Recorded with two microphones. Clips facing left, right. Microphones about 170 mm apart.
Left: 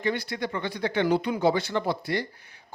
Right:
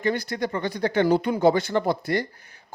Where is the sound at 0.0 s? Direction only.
40° right (ahead or behind).